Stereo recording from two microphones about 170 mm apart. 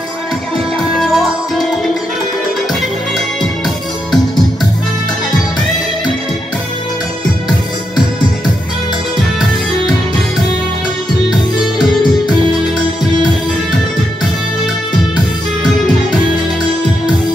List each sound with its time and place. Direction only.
0.7 s music: centre (ahead or behind)